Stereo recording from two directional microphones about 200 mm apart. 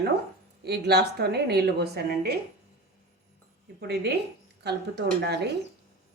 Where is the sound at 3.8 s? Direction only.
55° right (ahead or behind).